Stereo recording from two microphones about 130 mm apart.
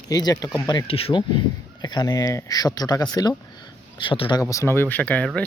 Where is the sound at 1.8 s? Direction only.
30° left (ahead or behind).